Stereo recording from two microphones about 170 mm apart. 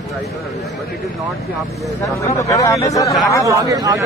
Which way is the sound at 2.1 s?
20° left (ahead or behind).